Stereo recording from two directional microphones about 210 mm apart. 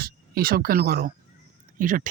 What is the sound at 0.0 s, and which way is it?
Speech, 45° right (ahead or behind).